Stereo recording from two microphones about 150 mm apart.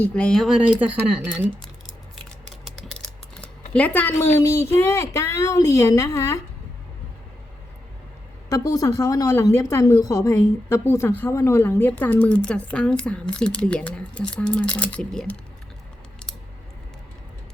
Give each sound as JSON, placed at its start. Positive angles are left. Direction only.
{"t": 0.0, "sound": "speech", "side_deg": 5}
{"t": 2.6, "sound": "typing", "side_deg": 5}
{"t": 3.7, "sound": "speech", "side_deg": 10}
{"t": 8.4, "sound": "speech", "side_deg": 25}